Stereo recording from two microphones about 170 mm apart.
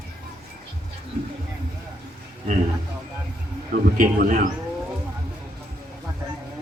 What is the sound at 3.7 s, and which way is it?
Speech, 55° right (ahead or behind).